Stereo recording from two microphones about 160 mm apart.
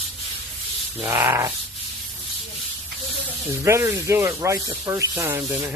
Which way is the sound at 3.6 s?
15° right (ahead or behind).